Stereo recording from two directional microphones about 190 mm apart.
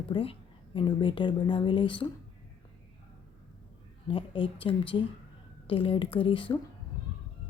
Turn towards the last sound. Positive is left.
turn(degrees=25)  # may be behind; listen again after turning